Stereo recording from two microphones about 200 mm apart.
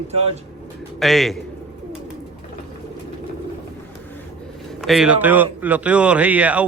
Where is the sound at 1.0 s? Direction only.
Centre (ahead or behind).